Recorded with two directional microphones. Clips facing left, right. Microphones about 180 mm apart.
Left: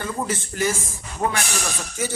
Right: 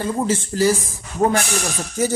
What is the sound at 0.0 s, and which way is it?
Speech, 30° right (ahead or behind).